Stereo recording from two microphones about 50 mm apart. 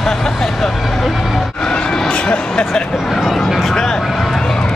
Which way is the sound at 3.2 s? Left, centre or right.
Centre.